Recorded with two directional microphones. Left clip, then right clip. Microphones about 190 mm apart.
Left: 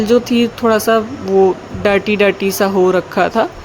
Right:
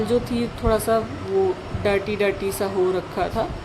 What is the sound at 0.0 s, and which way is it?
Speech, 40° left (ahead or behind).